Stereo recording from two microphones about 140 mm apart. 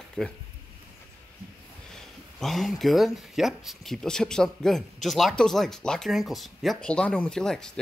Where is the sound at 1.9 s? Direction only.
Centre (ahead or behind).